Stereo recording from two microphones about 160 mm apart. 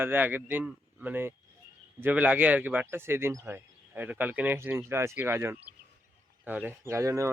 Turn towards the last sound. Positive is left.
turn(degrees=-20)  # may be behind; listen again after turning